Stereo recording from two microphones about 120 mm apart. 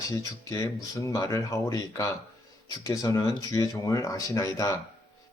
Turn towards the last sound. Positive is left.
turn(degrees=25)  # may be behind; listen again after turning